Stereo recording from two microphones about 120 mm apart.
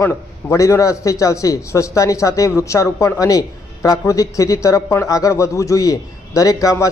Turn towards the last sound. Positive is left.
turn(degrees=25)  # may be behind; listen again after turning